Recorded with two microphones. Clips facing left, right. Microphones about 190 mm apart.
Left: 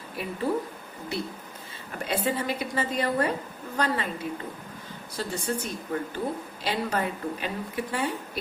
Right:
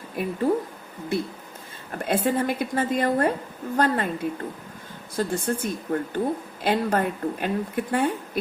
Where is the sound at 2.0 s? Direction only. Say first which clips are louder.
Right 5 dB; 50° right (ahead or behind).